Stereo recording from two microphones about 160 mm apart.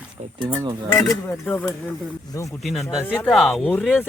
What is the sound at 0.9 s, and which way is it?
Speech, 20° left (ahead or behind).